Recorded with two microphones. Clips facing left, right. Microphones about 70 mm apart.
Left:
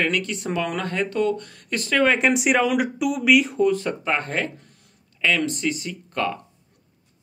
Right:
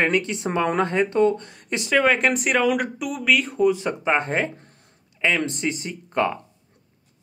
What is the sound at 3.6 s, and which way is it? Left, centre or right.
Speech, centre.